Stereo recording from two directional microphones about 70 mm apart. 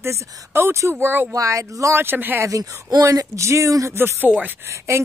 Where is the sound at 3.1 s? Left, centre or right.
Right.